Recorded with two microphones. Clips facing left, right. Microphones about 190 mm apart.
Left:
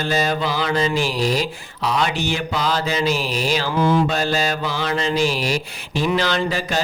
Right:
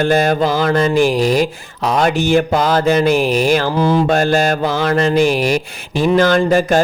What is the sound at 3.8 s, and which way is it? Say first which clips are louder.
Mantra: right 3 dB; 35° right (ahead or behind).